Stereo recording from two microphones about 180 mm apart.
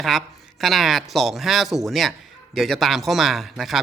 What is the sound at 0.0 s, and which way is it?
A man's voice, centre (ahead or behind).